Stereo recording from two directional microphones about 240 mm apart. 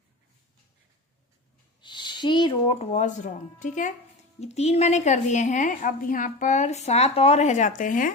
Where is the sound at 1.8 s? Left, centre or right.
Centre.